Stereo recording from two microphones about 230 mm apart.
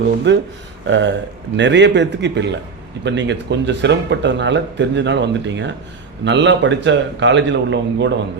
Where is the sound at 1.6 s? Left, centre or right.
Right.